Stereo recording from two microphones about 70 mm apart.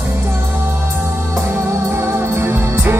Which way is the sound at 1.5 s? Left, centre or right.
Right.